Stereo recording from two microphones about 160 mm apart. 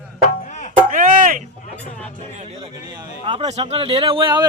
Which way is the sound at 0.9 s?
55° right (ahead or behind).